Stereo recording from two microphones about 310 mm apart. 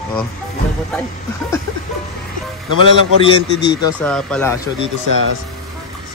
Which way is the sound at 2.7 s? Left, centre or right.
Right.